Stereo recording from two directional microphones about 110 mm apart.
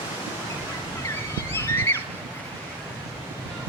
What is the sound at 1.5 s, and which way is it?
Vehicle, 25° left (ahead or behind).